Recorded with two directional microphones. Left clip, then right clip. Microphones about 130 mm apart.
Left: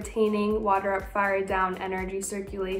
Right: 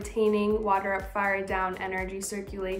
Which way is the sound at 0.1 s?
20° right (ahead or behind).